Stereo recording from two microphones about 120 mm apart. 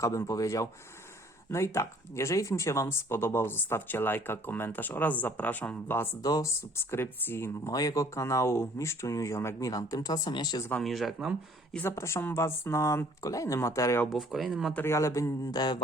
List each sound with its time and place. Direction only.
0.0 s speech: 30° left (ahead or behind)
6.2 s speech: 30° left (ahead or behind)
10.8 s speech: centre (ahead or behind)
11.8 s speech: 20° left (ahead or behind)
14.1 s speech: centre (ahead or behind)
14.7 s speech: 20° left (ahead or behind); by 15.8 s 35° left (ahead or behind)